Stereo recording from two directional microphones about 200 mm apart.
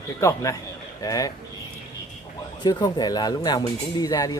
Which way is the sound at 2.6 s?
20° left (ahead or behind).